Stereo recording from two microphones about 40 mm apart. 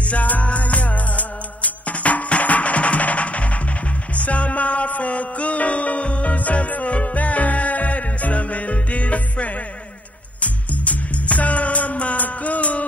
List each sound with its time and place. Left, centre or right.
0.0 s music: left